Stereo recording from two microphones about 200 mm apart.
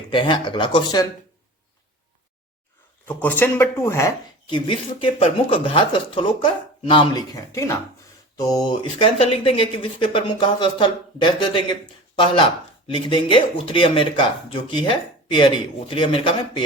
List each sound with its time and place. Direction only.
0.1 s speech: 25° left (ahead or behind)
3.1 s speech: 10° left (ahead or behind); by 16.6 s 25° left (ahead or behind)